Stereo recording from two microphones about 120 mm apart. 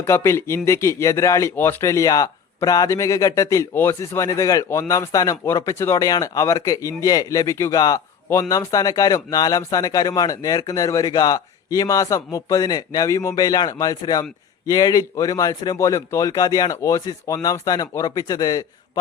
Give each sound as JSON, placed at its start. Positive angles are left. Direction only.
{"t": 0.0, "sound": "speech", "side_deg": 25}